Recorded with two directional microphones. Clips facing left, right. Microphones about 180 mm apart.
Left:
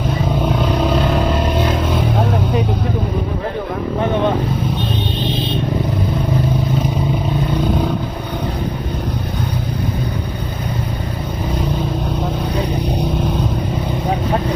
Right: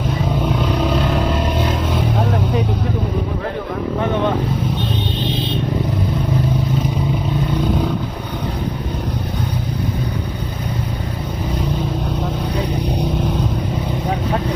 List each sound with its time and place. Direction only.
4.0 s vehicle: 20° left (ahead or behind)